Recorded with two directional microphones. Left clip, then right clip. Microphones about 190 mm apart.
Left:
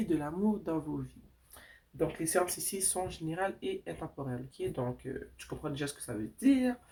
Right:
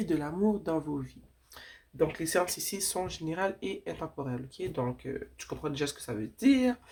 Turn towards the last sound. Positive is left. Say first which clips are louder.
# right 3 dB
turn(degrees=-30)  # may be behind; listen again after turning